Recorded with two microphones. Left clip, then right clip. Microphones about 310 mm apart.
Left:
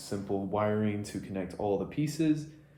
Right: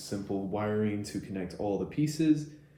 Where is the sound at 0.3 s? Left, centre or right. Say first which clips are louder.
Left 3 dB; left.